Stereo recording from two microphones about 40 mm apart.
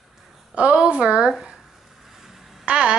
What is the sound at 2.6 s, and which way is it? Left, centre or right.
Speech, right.